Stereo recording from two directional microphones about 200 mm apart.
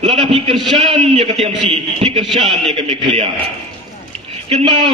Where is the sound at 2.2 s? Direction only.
Centre (ahead or behind).